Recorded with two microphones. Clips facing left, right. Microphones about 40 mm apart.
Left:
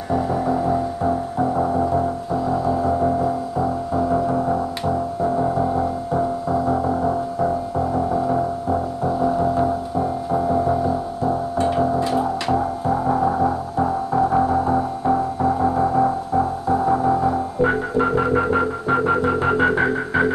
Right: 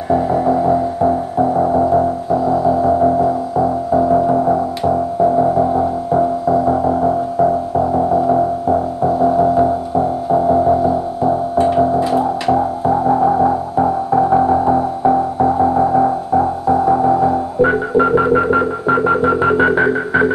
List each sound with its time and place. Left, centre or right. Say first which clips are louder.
0.1 s music: right 6 dB; centre
9.6 s music: right 6 dB; centre